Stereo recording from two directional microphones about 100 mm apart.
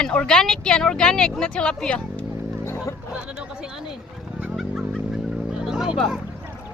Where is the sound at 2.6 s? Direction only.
25° left (ahead or behind).